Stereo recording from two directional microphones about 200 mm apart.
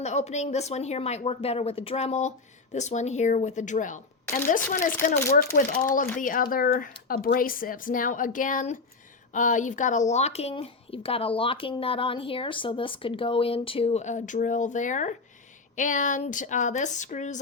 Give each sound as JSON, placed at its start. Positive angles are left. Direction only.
{"t": 0.0, "sound": "speech", "side_deg": 35}